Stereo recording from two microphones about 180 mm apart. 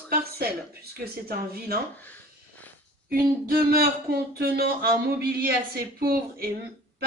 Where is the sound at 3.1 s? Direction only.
55° right (ahead or behind).